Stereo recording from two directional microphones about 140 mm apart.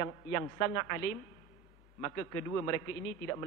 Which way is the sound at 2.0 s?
20° left (ahead or behind).